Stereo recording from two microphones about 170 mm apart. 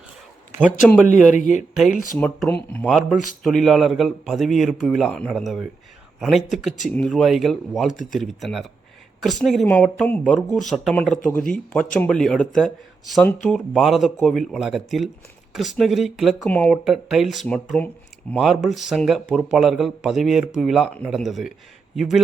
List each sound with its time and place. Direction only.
1.0 s speech: 50° left (ahead or behind)
2.1 s a man's voice: 5° left (ahead or behind)
16.8 s a man's voice: centre (ahead or behind)